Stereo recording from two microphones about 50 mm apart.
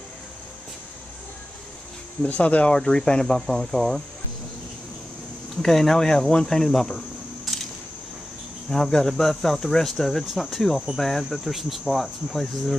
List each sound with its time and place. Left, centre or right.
2.2 s speech: left
2.7 s speech: centre
5.6 s speech: centre
7.5 s a sound: centre
8.6 s speech: centre